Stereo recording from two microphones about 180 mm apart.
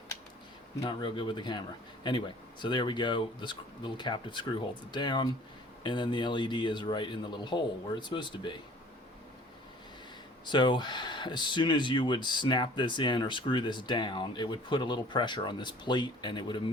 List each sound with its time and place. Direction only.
0.8 s speech: 25° left (ahead or behind)
10.4 s speech: 25° left (ahead or behind)